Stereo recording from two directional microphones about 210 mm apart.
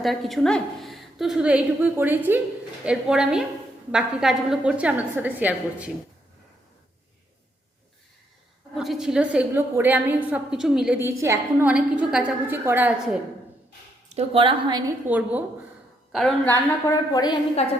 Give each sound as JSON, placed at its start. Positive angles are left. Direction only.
{"t": 0.0, "sound": "a woman's voice", "side_deg": 0}
{"t": 8.7, "sound": "a woman's voice", "side_deg": 0}
{"t": 14.2, "sound": "a woman's voice", "side_deg": -25}
{"t": 15.0, "sound": "a woman's voice", "side_deg": -10}
{"t": 16.8, "sound": "a woman's voice", "side_deg": 20}